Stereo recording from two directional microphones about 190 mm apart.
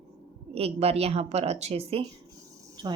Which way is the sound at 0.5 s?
30° right (ahead or behind).